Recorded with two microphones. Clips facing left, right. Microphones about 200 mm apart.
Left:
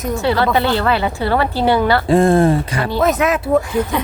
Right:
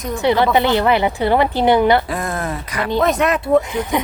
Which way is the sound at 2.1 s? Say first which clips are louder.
Left 11 dB; 30° left (ahead or behind).